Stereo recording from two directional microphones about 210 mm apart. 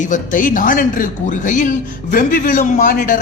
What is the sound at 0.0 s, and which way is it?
Speech, 35° left (ahead or behind).